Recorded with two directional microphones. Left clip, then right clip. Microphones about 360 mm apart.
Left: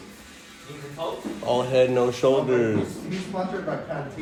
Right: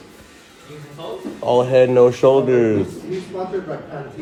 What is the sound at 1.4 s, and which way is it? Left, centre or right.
A man's voice, right.